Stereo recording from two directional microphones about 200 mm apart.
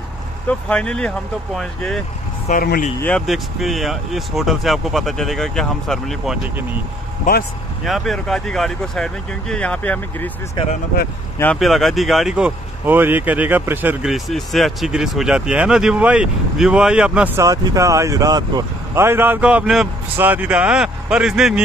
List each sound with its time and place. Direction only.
0.5 s speech: 5° left (ahead or behind)
2.4 s speech: 45° left (ahead or behind)
3.0 s speech: 5° left (ahead or behind)
7.8 s speech: centre (ahead or behind)
17.4 s speech: 15° right (ahead or behind)